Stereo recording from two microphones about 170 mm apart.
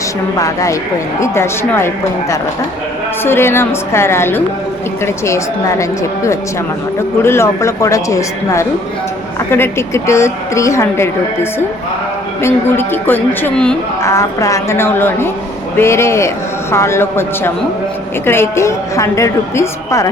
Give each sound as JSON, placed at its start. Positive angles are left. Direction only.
{"t": 0.3, "sound": "a woman's voice", "side_deg": 20}
{"t": 3.2, "sound": "a woman's voice", "side_deg": 15}
{"t": 12.4, "sound": "a woman's voice", "side_deg": 15}